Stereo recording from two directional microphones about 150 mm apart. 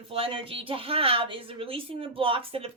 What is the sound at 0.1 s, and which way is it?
A woman's voice, 40° right (ahead or behind).